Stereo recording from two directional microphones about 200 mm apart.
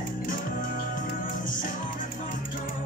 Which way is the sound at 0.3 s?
40° left (ahead or behind).